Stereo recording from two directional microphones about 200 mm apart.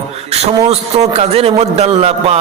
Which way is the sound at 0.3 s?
30° right (ahead or behind).